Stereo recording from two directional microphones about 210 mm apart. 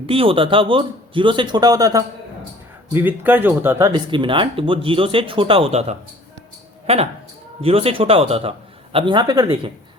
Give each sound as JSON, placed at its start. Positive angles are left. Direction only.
{"t": 0.0, "sound": "speech", "side_deg": -25}